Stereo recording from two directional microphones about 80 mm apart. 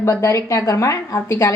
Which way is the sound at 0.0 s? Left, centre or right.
Left.